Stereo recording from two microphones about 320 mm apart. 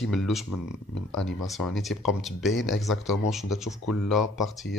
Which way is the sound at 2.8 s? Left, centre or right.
Centre.